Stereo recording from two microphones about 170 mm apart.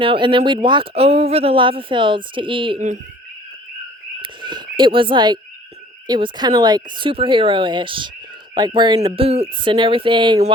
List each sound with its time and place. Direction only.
0.0 s speech: 30° right (ahead or behind)
4.2 s a sound: 25° right (ahead or behind)
6.1 s speech: 25° right (ahead or behind)